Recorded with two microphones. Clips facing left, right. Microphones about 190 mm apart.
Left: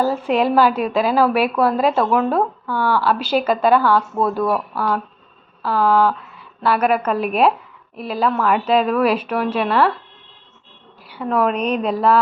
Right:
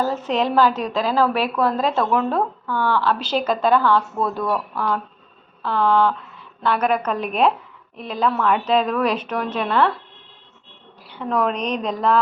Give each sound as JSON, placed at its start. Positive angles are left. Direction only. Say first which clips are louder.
{"t": 0.0, "sound": "a woman's voice", "louder": "left 3 dB", "side_deg": 10}
{"t": 11.1, "sound": "a woman's voice", "louder": "left 3 dB", "side_deg": 5}